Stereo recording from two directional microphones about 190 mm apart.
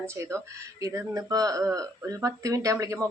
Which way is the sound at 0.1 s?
15° right (ahead or behind).